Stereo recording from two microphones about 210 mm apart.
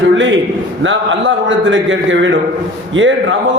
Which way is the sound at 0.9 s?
65° right (ahead or behind).